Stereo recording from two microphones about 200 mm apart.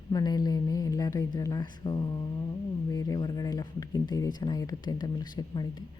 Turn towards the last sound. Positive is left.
turn(degrees=20)  # may be behind; listen again after turning